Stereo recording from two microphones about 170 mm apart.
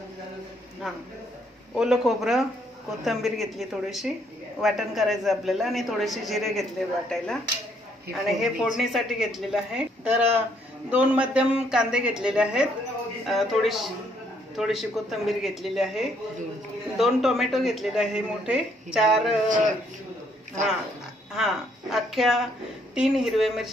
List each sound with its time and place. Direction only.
0.8 s a man's voice: centre (ahead or behind)
21.3 s a man's voice: centre (ahead or behind)